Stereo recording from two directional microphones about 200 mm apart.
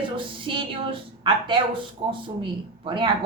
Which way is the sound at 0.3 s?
25° right (ahead or behind).